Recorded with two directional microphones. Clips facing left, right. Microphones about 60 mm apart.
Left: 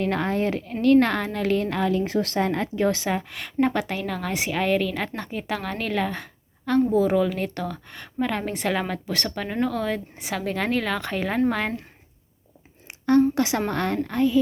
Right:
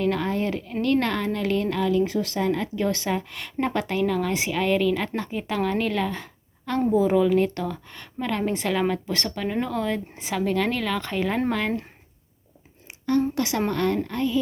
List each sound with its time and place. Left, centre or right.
0.0 s a woman's voice: left
1.7 s speech: left
2.7 s a woman's voice: left
3.2 s a woman's voice: centre
10.5 s a woman's voice: centre
13.1 s a woman's voice: left